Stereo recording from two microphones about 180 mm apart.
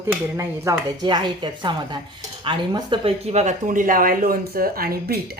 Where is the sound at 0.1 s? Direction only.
15° right (ahead or behind).